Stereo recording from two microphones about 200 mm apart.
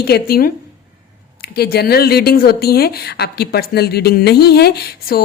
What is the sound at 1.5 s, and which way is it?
A woman's voice, 50° left (ahead or behind).